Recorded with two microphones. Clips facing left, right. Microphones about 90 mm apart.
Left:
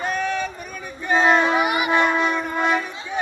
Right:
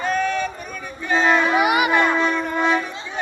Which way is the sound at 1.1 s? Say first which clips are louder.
Left 1 dB; 15° left (ahead or behind).